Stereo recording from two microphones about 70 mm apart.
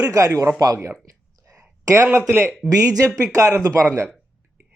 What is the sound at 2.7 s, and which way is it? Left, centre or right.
Speech, right.